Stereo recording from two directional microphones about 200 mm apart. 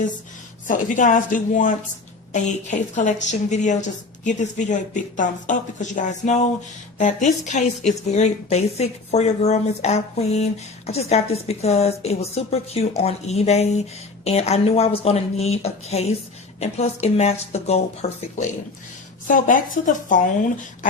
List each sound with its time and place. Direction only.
0.7 s speech: 40° left (ahead or behind)